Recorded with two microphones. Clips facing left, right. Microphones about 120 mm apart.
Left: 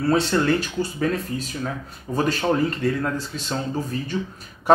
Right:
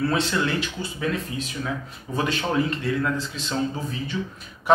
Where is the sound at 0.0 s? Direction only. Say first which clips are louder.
Left 3 dB; 40° left (ahead or behind).